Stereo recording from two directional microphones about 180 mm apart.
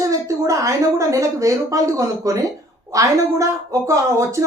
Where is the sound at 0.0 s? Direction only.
15° right (ahead or behind).